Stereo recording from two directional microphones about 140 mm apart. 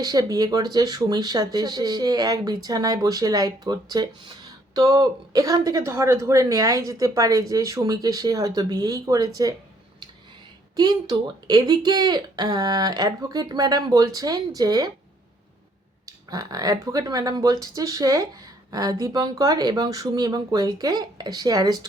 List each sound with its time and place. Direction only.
0.0 s speech: 30° right (ahead or behind)
10.8 s speech: 30° right (ahead or behind)
16.0 s speech: 25° right (ahead or behind)